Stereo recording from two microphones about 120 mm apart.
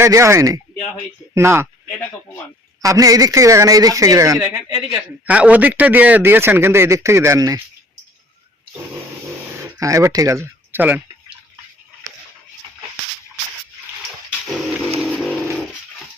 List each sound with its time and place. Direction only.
0.0 s speech: 25° right (ahead or behind)
2.8 s speech: 30° right (ahead or behind)
4.4 s a man's voice: 10° right (ahead or behind); by 7.6 s 30° right (ahead or behind)
9.6 s speech: 25° right (ahead or behind)
15.0 s vehicle: 5° left (ahead or behind)